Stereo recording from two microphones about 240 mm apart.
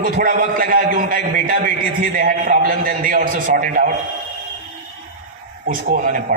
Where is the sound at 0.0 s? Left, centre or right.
Right.